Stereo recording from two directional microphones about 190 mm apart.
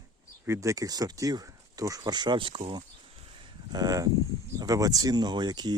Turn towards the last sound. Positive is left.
turn(degrees=-20)  # may be behind; listen again after turning